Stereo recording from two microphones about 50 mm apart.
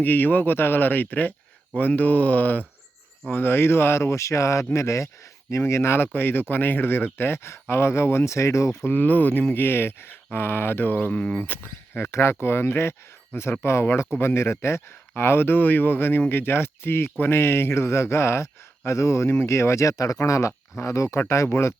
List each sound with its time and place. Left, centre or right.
0.0 s speech: left
3.3 s speech: left
5.5 s speech: left
6.1 s speech: left
8.9 s speech: left
9.6 s speech: left
11.2 s speech: left
11.4 s speech: left
12.1 s speech: left
21.5 s speech: left